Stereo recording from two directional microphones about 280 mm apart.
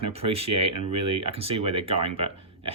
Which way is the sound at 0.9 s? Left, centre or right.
Right.